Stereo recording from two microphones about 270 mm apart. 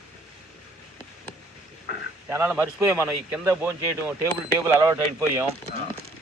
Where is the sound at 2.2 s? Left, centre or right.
Centre.